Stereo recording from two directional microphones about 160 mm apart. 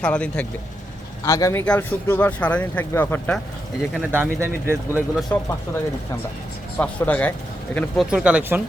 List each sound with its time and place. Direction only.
0.0 s speech: 5° left (ahead or behind)
1.2 s speech: 20° left (ahead or behind)
1.6 s speech: 10° left (ahead or behind)
3.9 s speech: 10° right (ahead or behind)
5.3 s speech: 15° left (ahead or behind)
6.7 s speech: 10° left (ahead or behind)
7.9 s speech: 5° right (ahead or behind)